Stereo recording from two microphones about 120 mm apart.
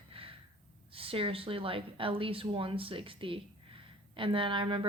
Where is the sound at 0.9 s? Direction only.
50° right (ahead or behind).